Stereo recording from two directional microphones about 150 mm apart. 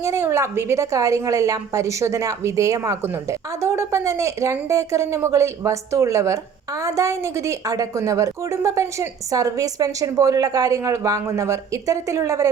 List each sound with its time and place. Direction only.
0.0 s a woman's voice: 20° right (ahead or behind)